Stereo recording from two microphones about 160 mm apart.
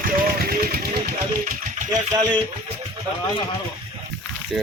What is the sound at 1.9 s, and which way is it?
Speech, 25° right (ahead or behind).